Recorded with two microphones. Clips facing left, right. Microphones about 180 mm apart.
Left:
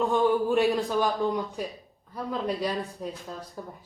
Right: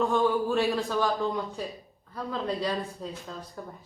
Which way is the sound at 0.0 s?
15° left (ahead or behind).